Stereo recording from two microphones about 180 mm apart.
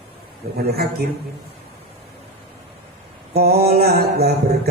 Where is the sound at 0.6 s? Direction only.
60° right (ahead or behind).